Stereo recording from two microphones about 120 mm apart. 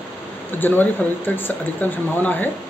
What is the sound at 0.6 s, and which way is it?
A man's voice, 15° left (ahead or behind).